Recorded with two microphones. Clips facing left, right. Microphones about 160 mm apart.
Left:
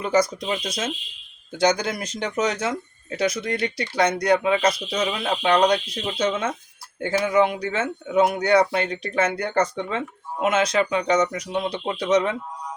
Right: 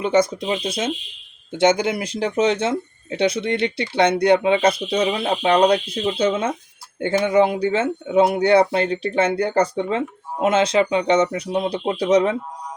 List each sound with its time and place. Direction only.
0.0 s speech: 25° right (ahead or behind)